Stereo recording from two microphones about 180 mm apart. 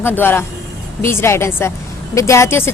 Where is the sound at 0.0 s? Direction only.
10° left (ahead or behind).